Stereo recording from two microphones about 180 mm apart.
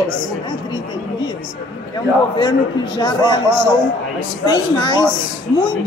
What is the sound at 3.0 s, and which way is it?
A woman's voice, 25° left (ahead or behind).